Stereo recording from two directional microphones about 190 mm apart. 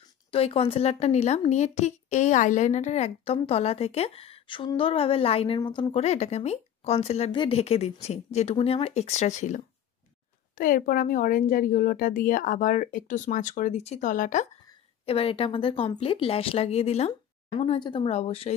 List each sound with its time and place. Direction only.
0.3 s speech: 30° left (ahead or behind)
15.0 s speech: 30° left (ahead or behind)